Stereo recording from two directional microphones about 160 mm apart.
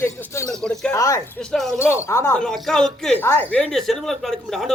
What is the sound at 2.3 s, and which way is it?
Speech, 5° left (ahead or behind).